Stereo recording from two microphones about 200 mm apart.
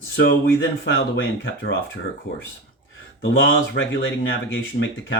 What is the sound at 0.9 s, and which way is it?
Speech, 55° left (ahead or behind).